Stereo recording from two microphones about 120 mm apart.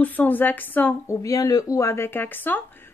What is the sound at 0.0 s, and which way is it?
Speech, 15° left (ahead or behind).